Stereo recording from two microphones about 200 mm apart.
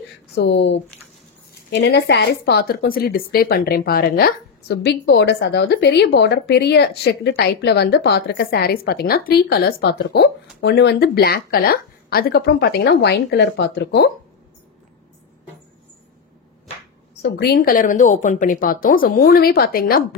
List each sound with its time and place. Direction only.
0.4 s speech: 60° left (ahead or behind)
17.2 s a woman's voice: 50° left (ahead or behind)